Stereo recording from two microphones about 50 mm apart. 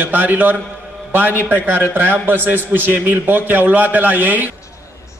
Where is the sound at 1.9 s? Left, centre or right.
Right.